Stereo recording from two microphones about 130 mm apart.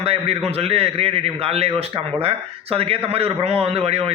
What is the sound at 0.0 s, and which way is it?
A man's voice, 50° right (ahead or behind).